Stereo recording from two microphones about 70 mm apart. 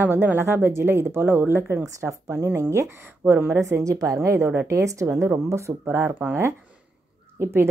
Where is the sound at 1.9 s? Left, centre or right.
Right.